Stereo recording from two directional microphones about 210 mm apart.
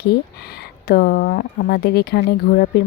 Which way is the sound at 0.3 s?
50° left (ahead or behind).